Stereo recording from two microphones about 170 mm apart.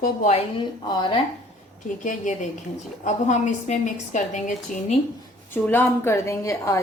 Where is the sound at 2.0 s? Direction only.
50° left (ahead or behind).